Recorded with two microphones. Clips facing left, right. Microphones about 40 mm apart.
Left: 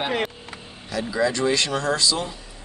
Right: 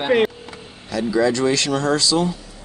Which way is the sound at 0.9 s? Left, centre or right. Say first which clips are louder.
Right 5 dB; centre.